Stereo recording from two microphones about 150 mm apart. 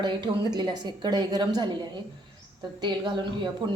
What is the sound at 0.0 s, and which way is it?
A woman's voice, 30° right (ahead or behind).